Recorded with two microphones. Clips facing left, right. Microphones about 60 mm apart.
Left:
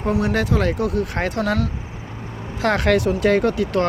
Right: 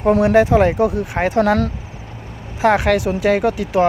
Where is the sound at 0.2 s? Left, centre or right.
Right.